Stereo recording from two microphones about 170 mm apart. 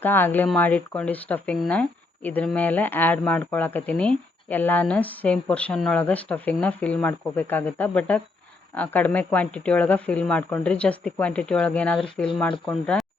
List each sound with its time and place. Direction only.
0.0 s speech: 10° left (ahead or behind)